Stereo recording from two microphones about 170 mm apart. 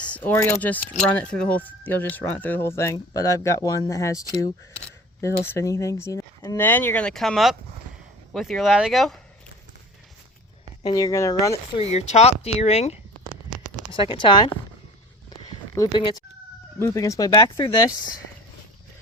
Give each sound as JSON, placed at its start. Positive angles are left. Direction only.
{"t": 0.3, "sound": "speech", "side_deg": 10}
{"t": 5.5, "sound": "speech", "side_deg": 15}
{"t": 10.8, "sound": "speech", "side_deg": 20}
{"t": 11.8, "sound": "speech", "side_deg": 40}
{"t": 15.9, "sound": "speech", "side_deg": 30}
{"t": 16.8, "sound": "speech", "side_deg": 20}